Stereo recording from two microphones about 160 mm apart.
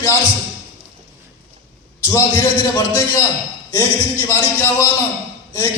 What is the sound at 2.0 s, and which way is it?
A man's voice, 15° left (ahead or behind).